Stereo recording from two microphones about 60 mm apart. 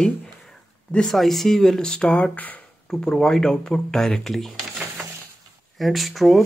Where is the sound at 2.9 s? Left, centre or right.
Centre.